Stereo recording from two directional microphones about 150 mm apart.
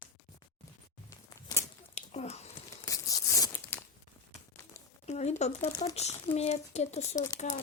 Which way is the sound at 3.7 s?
15° left (ahead or behind).